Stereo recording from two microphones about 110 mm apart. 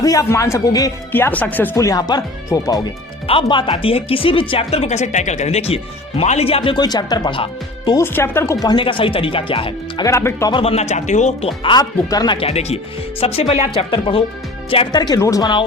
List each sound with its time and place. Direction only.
0.0 s speech: 30° left (ahead or behind)
1.1 s speech: 15° left (ahead or behind)
1.8 s speech: 35° left (ahead or behind)
3.2 s speech: 55° left (ahead or behind)
6.8 s speech: 40° left (ahead or behind)
8.0 s speech: 20° left (ahead or behind)
8.6 s speech: 50° left (ahead or behind)
10.0 s speech: 25° left (ahead or behind)
10.5 s speech: 60° left (ahead or behind)
11.7 s speech: 35° left (ahead or behind)
12.4 s speech: 70° left (ahead or behind)
14.9 s speech: 40° left (ahead or behind)